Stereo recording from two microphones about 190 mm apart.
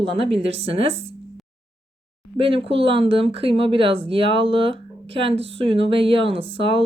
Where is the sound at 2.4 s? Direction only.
30° right (ahead or behind).